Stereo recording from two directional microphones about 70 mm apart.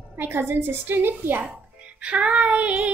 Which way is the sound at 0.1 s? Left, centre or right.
Right.